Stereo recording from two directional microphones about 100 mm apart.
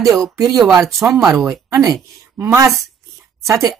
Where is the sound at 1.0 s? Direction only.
30° right (ahead or behind).